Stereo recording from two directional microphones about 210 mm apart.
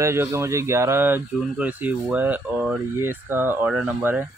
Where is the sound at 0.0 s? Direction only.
10° right (ahead or behind).